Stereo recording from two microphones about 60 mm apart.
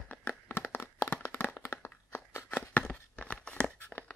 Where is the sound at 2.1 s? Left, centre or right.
Left; by 3.7 s centre.